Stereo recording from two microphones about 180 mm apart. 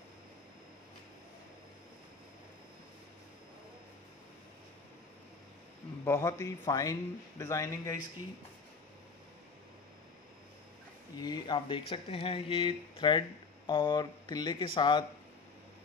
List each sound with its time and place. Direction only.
6.0 s a man's voice: 15° left (ahead or behind)
11.1 s speech: 20° left (ahead or behind)